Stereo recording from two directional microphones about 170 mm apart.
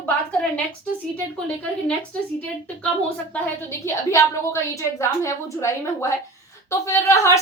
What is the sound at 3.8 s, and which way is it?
A woman's voice, 15° left (ahead or behind).